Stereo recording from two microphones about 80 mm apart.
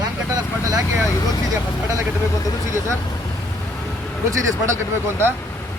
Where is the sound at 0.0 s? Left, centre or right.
Right.